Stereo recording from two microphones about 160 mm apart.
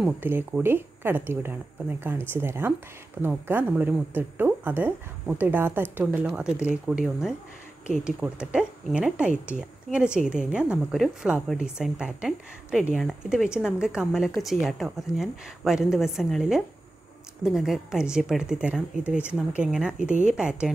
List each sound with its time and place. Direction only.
0.0 s a woman's voice: 10° right (ahead or behind)